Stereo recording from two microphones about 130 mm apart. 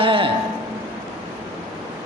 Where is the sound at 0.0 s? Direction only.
45° right (ahead or behind).